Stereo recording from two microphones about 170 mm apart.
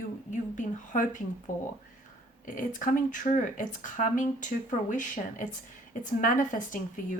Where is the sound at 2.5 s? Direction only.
50° left (ahead or behind).